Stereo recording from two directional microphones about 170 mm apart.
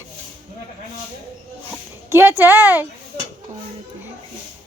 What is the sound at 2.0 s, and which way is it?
Speech, 15° right (ahead or behind).